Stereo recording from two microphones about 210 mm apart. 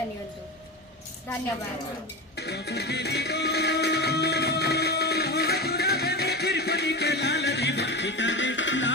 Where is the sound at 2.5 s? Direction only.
50° left (ahead or behind).